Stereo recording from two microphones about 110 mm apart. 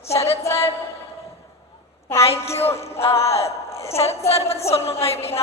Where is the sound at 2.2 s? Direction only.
65° left (ahead or behind).